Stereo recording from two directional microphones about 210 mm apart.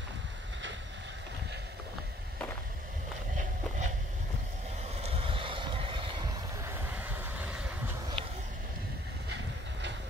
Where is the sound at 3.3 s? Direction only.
35° right (ahead or behind).